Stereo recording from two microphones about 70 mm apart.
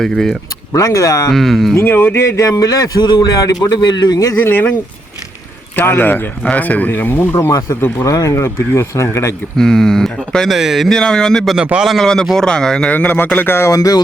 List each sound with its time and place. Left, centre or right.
0.0 s speech: centre
0.7 s speech: left
1.3 s speech: centre
1.7 s speech: left
2.5 s a man's voice: left
4.4 s speech: left
5.7 s speech: left
7.9 s speech: left
9.6 s speech: centre
11.5 s a man's voice: centre
11.9 s speech: centre
12.9 s speech: left
13.7 s speech: left